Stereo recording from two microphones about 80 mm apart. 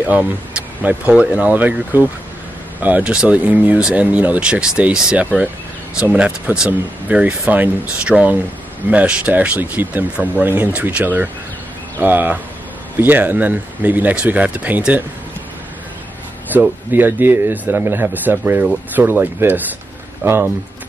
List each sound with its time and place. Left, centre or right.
0.0 s speech: centre
16.5 s speech: right